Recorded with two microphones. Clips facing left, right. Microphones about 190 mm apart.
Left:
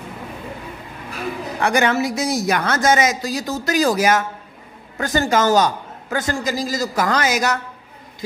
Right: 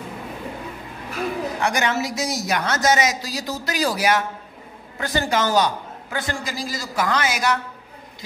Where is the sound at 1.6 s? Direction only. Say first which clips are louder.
Left 6 dB; 55° left (ahead or behind).